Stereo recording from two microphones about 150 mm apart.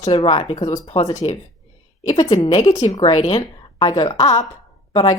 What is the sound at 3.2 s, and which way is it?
A woman's voice, 35° left (ahead or behind).